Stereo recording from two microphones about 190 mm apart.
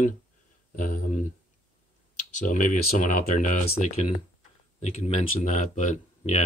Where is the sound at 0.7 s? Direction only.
45° left (ahead or behind).